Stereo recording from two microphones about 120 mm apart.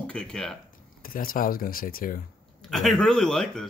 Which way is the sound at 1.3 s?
90° left.